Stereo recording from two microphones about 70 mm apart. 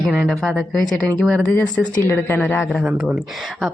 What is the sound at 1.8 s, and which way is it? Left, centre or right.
Speech, left.